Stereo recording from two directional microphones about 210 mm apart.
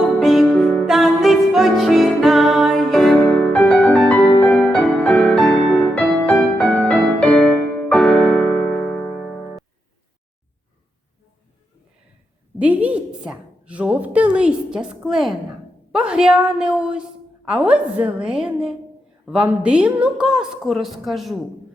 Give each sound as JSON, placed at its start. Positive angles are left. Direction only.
{"t": 0.0, "sound": "music", "side_deg": 0}
{"t": 12.5, "sound": "a sound", "side_deg": -5}
{"t": 15.9, "sound": "a woman's voice", "side_deg": -5}